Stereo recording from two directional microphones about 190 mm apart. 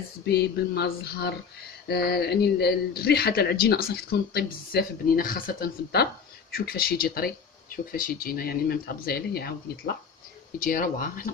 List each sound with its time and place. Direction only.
0.3 s speech: 60° left (ahead or behind)